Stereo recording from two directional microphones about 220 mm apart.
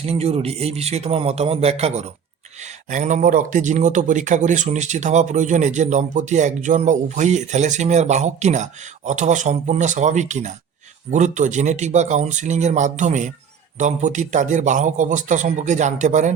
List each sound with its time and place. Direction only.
0.0 s a man's voice: 30° right (ahead or behind)